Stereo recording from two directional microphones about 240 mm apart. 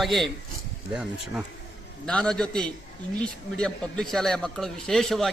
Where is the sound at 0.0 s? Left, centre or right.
Centre.